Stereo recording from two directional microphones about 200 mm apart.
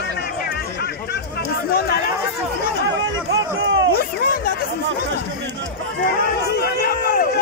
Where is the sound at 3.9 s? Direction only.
50° left (ahead or behind).